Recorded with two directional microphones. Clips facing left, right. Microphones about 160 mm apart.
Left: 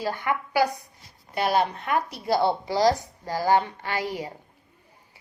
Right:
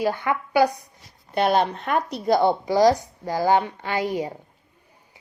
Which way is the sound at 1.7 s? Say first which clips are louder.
Right 2 dB; 25° right (ahead or behind).